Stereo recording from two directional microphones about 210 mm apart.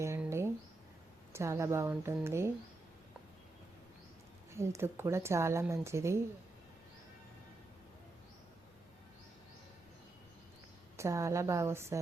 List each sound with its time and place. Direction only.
0.0 s a sound: 15° right (ahead or behind)
1.3 s speech: 15° right (ahead or behind)
4.5 s speech: 15° right (ahead or behind)
10.9 s speech: 15° right (ahead or behind)